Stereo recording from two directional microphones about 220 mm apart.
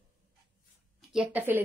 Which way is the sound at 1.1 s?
5° right (ahead or behind).